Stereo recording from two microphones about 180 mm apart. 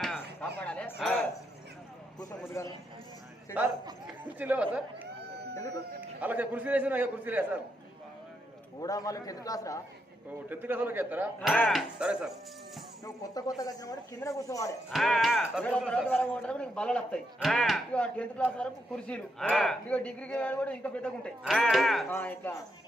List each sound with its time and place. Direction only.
0.6 s a sound: 5° left (ahead or behind)
2.6 s speech: 15° left (ahead or behind)
4.0 s speech: 10° right (ahead or behind)
6.0 s a man's voice: 10° right (ahead or behind)
8.8 s speech: 20° left (ahead or behind)
10.5 s a man's voice: 10° right (ahead or behind)
11.4 s speech: 5° left (ahead or behind)
13.1 s speech: 20° left (ahead or behind)
14.8 s speech: centre (ahead or behind)
22.1 s speech: 10° left (ahead or behind)